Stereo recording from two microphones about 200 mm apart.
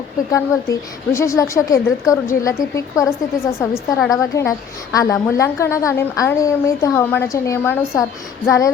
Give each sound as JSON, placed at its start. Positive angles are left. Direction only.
{"t": 0.3, "sound": "a woman's voice", "side_deg": 15}